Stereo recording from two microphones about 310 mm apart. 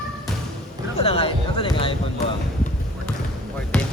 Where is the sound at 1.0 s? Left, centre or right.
Centre.